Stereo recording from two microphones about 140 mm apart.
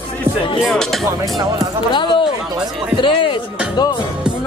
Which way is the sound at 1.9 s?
35° left (ahead or behind).